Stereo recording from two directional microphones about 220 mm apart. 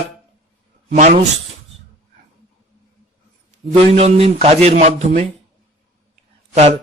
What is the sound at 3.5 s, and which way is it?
A man's voice, 30° right (ahead or behind).